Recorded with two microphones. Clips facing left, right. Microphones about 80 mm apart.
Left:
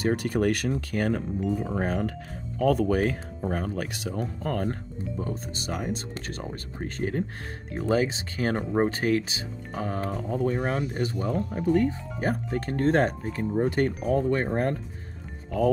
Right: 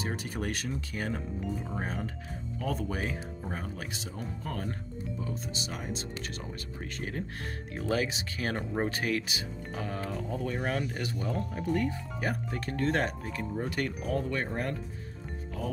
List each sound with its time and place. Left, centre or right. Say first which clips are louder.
0.0 s speech: left 10 dB; left
9.7 s speech: left 6 dB; left
10.5 s speech: left 4 dB; left
11.1 s speech: left 5 dB; left
11.5 s speech: left 8 dB; left